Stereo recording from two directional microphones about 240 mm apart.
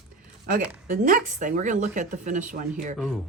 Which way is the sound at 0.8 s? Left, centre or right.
Right.